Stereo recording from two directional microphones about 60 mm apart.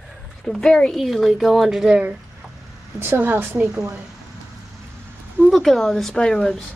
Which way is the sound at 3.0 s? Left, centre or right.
Right.